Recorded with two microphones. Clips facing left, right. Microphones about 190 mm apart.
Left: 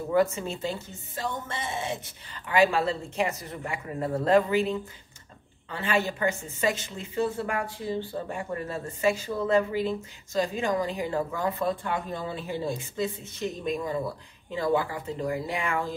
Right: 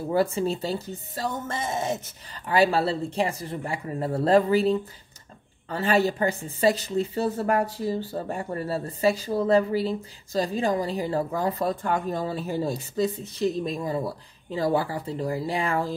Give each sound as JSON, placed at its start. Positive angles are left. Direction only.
{"t": 0.1, "sound": "a woman's voice", "side_deg": -30}